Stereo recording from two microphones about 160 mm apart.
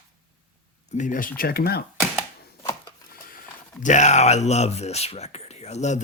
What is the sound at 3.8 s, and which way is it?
Speech, 45° left (ahead or behind).